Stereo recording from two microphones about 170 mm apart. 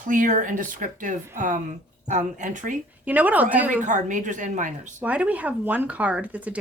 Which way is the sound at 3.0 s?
10° right (ahead or behind).